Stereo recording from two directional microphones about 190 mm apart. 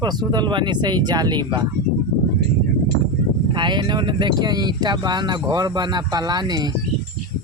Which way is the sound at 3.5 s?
25° right (ahead or behind).